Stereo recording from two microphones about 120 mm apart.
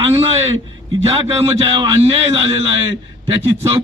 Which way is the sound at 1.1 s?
50° right (ahead or behind).